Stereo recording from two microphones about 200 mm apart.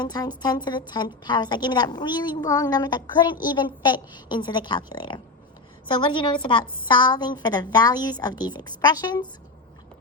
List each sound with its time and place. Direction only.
0.0 s a woman's voice: 20° left (ahead or behind)